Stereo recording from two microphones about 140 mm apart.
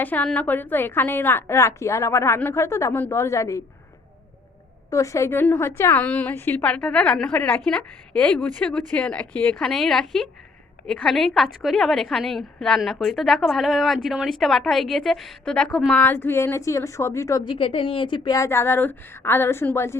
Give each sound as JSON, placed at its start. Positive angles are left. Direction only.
{"t": 0.0, "sound": "a woman's voice", "side_deg": 10}
{"t": 4.9, "sound": "a woman's voice", "side_deg": 20}
{"t": 16.0, "sound": "speech", "side_deg": 15}
{"t": 17.4, "sound": "speech", "side_deg": 35}
{"t": 18.3, "sound": "a woman's voice", "side_deg": 20}